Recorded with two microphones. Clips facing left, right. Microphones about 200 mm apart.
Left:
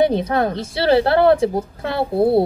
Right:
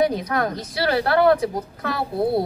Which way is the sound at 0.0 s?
25° left (ahead or behind).